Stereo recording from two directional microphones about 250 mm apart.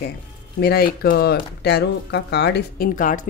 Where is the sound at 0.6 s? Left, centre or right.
Left.